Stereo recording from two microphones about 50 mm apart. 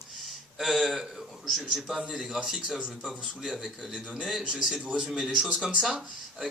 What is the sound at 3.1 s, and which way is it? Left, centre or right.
A man's voice, centre.